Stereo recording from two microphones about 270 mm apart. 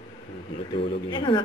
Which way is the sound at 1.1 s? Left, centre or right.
Centre.